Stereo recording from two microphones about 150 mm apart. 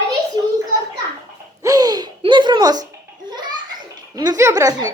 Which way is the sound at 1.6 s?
25° right (ahead or behind).